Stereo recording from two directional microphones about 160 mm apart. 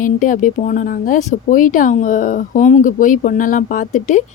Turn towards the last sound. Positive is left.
turn(degrees=50)  # may be behind; listen again after turning